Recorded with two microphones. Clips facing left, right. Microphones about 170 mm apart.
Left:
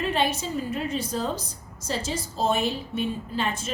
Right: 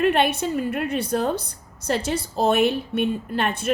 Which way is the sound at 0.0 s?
65° right (ahead or behind).